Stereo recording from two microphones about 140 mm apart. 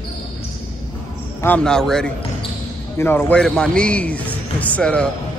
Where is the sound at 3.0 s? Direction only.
15° left (ahead or behind).